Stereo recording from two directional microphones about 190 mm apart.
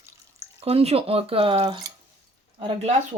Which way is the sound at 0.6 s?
30° right (ahead or behind).